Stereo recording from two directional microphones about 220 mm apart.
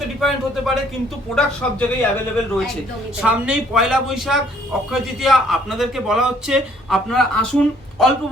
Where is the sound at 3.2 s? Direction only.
5° right (ahead or behind).